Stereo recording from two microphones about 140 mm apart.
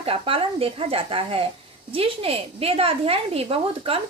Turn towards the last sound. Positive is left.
turn(degrees=-40)  # may be behind; listen again after turning